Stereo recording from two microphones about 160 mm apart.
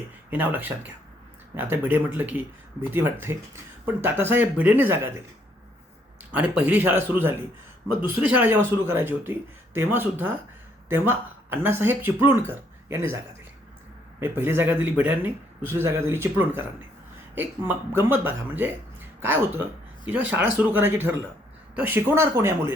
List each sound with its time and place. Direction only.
0.3 s a man's voice: 10° right (ahead or behind)
6.3 s a man's voice: 10° right (ahead or behind)
14.2 s a man's voice: 15° right (ahead or behind)